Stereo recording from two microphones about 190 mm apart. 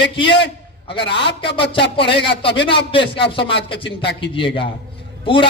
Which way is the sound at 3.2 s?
25° left (ahead or behind).